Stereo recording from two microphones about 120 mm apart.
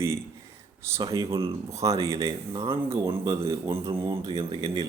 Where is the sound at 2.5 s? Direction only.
45° right (ahead or behind).